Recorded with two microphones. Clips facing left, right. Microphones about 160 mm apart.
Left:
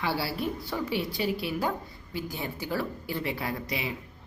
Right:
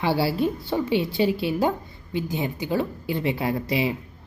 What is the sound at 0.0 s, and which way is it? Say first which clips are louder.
A woman's voice: right 8 dB; 25° right (ahead or behind).